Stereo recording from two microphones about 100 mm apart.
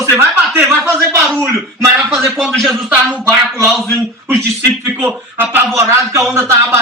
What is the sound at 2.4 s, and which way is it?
Speech, centre (ahead or behind).